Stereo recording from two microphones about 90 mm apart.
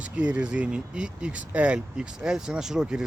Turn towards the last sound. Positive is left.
turn(degrees=-10)  # may be behind; listen again after turning